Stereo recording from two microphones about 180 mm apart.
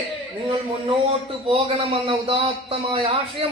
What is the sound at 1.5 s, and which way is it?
A man's voice, 30° right (ahead or behind).